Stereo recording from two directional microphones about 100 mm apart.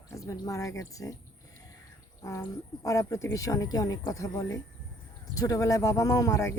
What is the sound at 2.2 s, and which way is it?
Speech, 35° left (ahead or behind).